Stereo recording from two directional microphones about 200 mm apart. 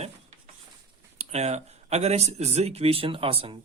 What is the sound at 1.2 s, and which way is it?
Speech, 35° right (ahead or behind).